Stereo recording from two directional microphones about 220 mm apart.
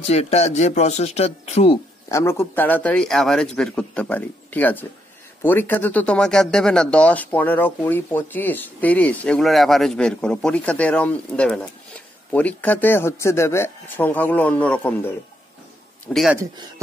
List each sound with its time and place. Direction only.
0.0 s speech: 30° left (ahead or behind)
2.0 s speech: 10° left (ahead or behind)
16.3 s speech: 15° right (ahead or behind)